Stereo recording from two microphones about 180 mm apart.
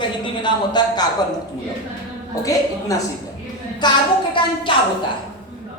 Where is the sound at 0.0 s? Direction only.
25° left (ahead or behind).